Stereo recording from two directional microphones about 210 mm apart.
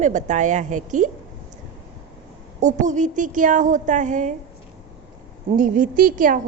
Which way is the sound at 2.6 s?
35° right (ahead or behind).